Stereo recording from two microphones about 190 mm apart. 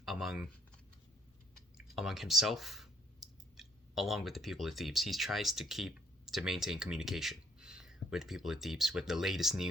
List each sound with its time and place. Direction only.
0.0 s typing: centre (ahead or behind)
2.0 s speech: centre (ahead or behind)